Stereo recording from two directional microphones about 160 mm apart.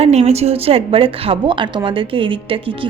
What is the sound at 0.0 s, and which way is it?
A woman's voice, 45° right (ahead or behind).